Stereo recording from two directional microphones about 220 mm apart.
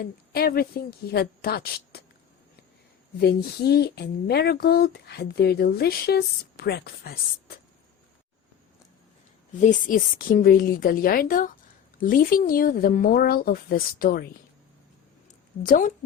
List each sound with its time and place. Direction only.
0.0 s speech: 45° left (ahead or behind)
3.2 s speech: 45° left (ahead or behind)
9.6 s speech: 35° left (ahead or behind)
15.6 s speech: 40° left (ahead or behind)